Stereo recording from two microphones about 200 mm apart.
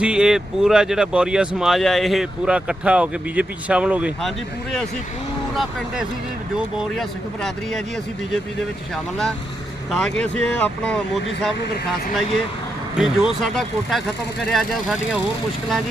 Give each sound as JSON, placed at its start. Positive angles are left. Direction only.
{"t": 0.0, "sound": "speech", "side_deg": -5}
{"t": 6.7, "sound": "speech", "side_deg": 0}
{"t": 9.9, "sound": "speech", "side_deg": 5}
{"t": 11.6, "sound": "speech", "side_deg": 50}
{"t": 13.0, "sound": "speech", "side_deg": 0}